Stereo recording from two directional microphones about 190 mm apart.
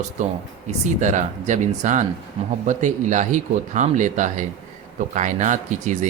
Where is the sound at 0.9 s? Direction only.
40° right (ahead or behind).